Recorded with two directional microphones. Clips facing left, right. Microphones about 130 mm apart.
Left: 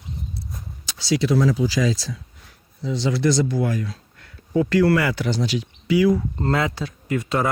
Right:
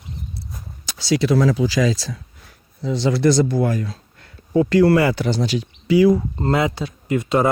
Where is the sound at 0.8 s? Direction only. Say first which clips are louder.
Right 2 dB; 60° right (ahead or behind); by 2.2 s 80° right.